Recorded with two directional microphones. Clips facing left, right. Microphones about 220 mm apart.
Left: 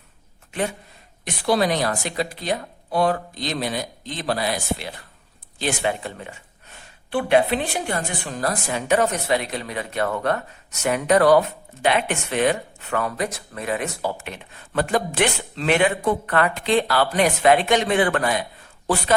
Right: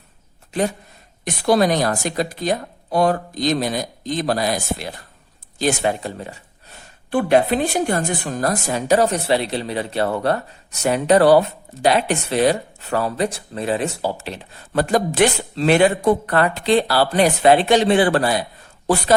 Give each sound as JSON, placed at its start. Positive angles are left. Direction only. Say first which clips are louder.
{"t": 0.5, "sound": "a woman's voice", "louder": "right 5 dB", "side_deg": -40}